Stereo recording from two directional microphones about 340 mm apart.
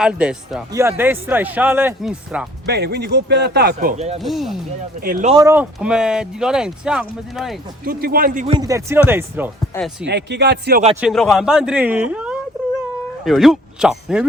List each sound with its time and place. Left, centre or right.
0.0 s speech: centre
2.6 s speech: right
4.2 s speech: centre
4.9 s speech: right; by 7.6 s centre
7.9 s speech: right; by 10.1 s centre
10.1 s speech: right
11.0 s speech: centre